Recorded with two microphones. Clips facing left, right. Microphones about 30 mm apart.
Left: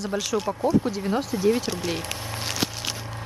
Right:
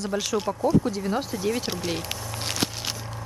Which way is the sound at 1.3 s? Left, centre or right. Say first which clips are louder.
Left 5 dB; centre.